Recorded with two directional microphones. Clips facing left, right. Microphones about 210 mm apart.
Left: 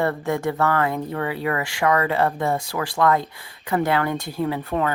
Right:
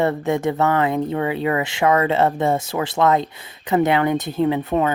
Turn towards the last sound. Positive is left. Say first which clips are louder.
# right 5 dB
turn(degrees=-20)  # may be behind; listen again after turning